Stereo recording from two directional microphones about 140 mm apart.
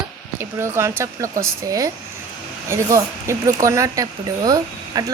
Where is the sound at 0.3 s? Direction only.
20° right (ahead or behind).